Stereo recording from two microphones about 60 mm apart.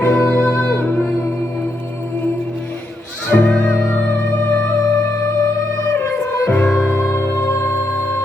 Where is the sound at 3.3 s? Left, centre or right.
Left.